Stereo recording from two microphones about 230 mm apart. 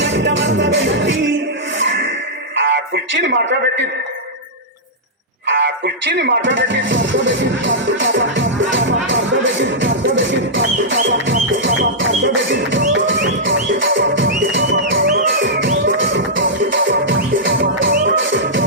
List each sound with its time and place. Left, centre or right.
0.0 s music: right
2.6 s a man's voice: right
5.5 s speech: right
8.7 s music: right